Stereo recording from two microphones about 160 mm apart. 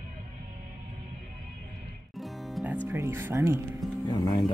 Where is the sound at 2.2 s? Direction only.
Centre (ahead or behind).